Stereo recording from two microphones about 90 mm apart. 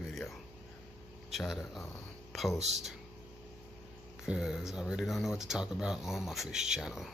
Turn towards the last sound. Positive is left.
turn(degrees=-5)  # may be behind; listen again after turning